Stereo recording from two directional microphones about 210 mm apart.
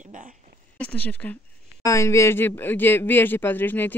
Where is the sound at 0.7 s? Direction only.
5° left (ahead or behind).